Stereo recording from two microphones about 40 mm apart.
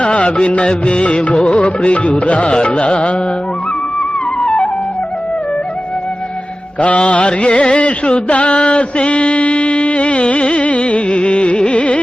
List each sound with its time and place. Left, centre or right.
0.0 s music: left
4.4 s music: left
6.7 s music: left